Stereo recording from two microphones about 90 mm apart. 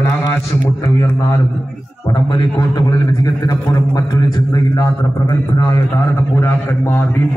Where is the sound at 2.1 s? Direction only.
55° left (ahead or behind).